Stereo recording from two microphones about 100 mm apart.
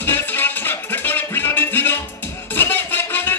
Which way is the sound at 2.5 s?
20° left (ahead or behind).